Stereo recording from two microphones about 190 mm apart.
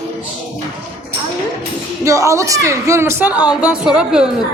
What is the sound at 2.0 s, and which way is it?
A woman's voice, 15° right (ahead or behind).